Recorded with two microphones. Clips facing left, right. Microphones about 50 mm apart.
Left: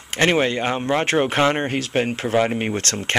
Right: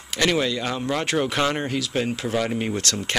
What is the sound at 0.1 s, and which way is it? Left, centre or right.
Speech, left.